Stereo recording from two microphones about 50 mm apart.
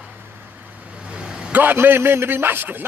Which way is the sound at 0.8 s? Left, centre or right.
Right.